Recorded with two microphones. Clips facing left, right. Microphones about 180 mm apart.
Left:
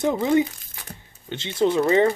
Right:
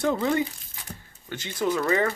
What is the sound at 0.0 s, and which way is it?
Speech, 20° left (ahead or behind).